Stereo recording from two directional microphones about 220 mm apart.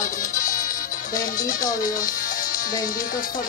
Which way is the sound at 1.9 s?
40° left (ahead or behind).